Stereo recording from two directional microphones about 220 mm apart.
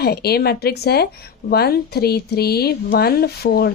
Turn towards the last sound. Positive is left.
turn(degrees=45)  # may be behind; listen again after turning